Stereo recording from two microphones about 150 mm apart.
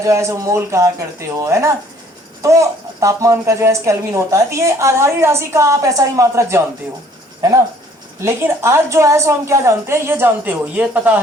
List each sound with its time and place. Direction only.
0.0 s a woman's voice: 20° right (ahead or behind)
8.2 s a woman's voice: 15° right (ahead or behind)